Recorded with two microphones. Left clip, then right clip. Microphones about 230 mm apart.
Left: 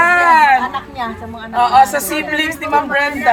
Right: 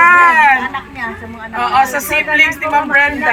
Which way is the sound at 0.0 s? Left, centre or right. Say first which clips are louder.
Right 2 dB; centre.